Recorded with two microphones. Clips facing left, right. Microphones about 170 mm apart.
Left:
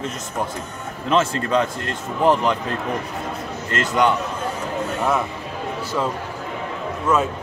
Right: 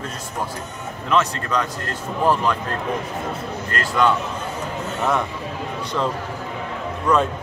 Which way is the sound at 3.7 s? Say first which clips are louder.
Left 1 dB; 20° left (ahead or behind).